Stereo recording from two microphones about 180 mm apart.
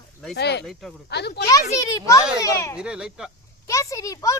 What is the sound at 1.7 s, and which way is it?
A child's voice, 15° left (ahead or behind).